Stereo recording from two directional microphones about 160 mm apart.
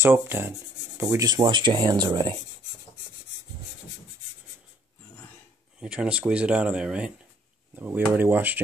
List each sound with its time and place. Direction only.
0.0 s speech: 15° right (ahead or behind)
5.8 s speech: 5° right (ahead or behind)